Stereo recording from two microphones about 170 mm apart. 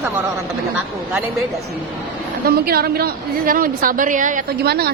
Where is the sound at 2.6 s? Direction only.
65° right (ahead or behind).